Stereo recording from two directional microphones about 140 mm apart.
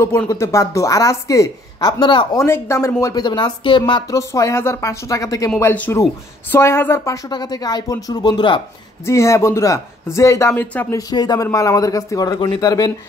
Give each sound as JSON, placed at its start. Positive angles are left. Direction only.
{"t": 0.0, "sound": "speech", "side_deg": 20}
{"t": 2.3, "sound": "speech", "side_deg": 20}
{"t": 4.2, "sound": "speech", "side_deg": 20}
{"t": 7.2, "sound": "speech", "side_deg": 30}
{"t": 9.0, "sound": "speech", "side_deg": 20}
{"t": 11.0, "sound": "speech", "side_deg": 30}